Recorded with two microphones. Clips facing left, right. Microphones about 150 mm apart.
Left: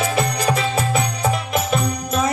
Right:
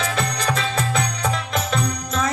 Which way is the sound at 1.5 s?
5° left (ahead or behind).